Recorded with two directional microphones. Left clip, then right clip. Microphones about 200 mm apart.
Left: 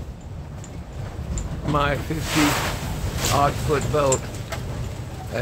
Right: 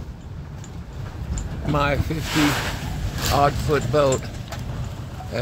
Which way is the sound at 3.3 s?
15° right (ahead or behind).